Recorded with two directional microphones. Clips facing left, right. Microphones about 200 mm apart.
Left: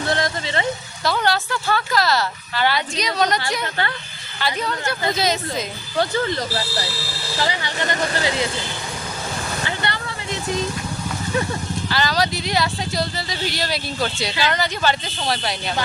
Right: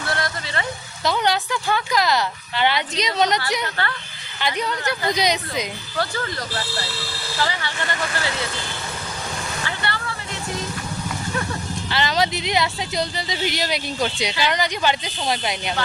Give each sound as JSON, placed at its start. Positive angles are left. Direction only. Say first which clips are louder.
{"t": 0.0, "sound": "speech", "louder": "left 4 dB", "side_deg": 20}
{"t": 1.0, "sound": "speech", "louder": "even", "side_deg": -20}
{"t": 3.6, "sound": "speech", "louder": "left 1 dB", "side_deg": 20}
{"t": 4.4, "sound": "speech", "louder": "even", "side_deg": -20}
{"t": 6.0, "sound": "speech", "louder": "left 5 dB", "side_deg": 20}
{"t": 7.3, "sound": "vehicle", "louder": "left 2 dB", "side_deg": 15}
{"t": 7.9, "sound": "speech", "louder": "left 5 dB", "side_deg": 40}
{"t": 8.1, "sound": "speech", "louder": "left 4 dB", "side_deg": 20}
{"t": 9.6, "sound": "vehicle", "louder": "left 1 dB", "side_deg": 20}
{"t": 11.9, "sound": "speech", "louder": "even", "side_deg": -25}